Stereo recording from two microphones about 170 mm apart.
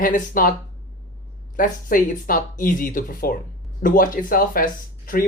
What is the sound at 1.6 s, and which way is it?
Speech, 55° left (ahead or behind).